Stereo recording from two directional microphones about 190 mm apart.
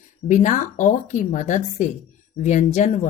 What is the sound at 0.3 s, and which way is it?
Speech, 40° left (ahead or behind).